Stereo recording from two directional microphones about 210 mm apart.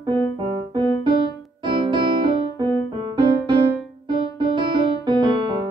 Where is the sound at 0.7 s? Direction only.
20° right (ahead or behind).